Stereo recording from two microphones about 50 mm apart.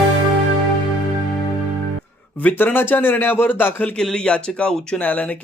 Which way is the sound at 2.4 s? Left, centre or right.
Left.